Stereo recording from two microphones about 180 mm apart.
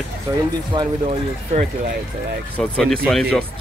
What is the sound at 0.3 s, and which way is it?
Speech, 25° right (ahead or behind).